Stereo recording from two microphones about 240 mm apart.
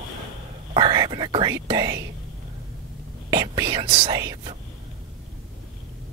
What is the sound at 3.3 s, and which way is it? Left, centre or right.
Speech, centre.